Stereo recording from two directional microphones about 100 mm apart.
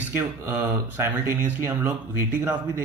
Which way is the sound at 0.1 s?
25° right (ahead or behind).